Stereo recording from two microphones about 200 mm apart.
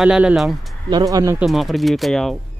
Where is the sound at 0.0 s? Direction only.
5° right (ahead or behind).